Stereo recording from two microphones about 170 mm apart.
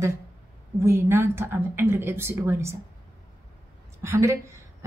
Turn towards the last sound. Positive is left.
turn(degrees=-15)  # may be behind; listen again after turning